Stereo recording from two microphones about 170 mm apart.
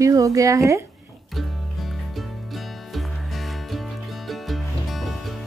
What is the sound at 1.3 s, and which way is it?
Music, centre (ahead or behind).